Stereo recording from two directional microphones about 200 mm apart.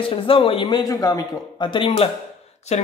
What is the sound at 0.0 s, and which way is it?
A man's voice, 25° left (ahead or behind).